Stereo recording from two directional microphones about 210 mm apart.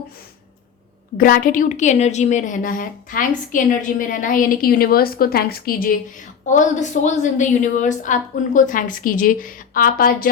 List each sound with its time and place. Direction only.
1.1 s a woman's voice: 40° left (ahead or behind)